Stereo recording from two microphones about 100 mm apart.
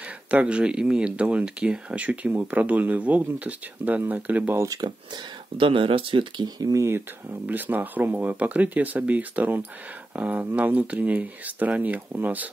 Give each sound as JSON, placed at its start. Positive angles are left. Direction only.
{"t": 0.3, "sound": "speech", "side_deg": -10}
{"t": 4.6, "sound": "speech", "side_deg": -40}
{"t": 5.6, "sound": "speech", "side_deg": -65}